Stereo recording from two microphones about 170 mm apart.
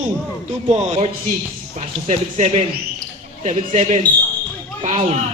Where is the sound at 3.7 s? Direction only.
45° right (ahead or behind).